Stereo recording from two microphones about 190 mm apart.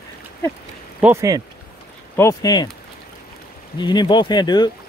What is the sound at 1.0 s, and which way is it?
Speech, 15° right (ahead or behind).